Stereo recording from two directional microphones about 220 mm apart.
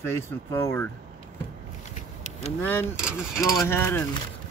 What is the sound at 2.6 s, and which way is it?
Speech, 10° left (ahead or behind).